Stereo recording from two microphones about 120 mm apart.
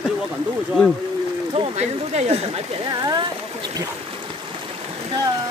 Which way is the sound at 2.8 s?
35° right (ahead or behind).